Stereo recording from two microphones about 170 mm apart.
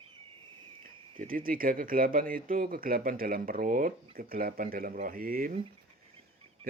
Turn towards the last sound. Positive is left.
turn(degrees=-55)  # may be behind; listen again after turning